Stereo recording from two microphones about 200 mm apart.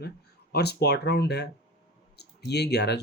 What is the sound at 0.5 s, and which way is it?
Speech, 55° left (ahead or behind).